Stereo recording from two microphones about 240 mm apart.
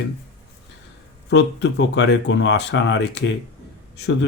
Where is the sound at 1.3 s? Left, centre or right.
Left.